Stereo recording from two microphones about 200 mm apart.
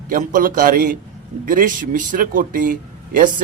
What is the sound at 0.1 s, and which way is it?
Speech, 45° right (ahead or behind).